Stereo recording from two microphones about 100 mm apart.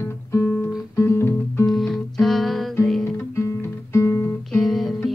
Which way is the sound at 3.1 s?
30° left (ahead or behind).